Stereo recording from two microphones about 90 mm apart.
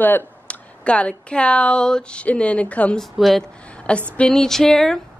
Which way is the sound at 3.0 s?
Centre (ahead or behind).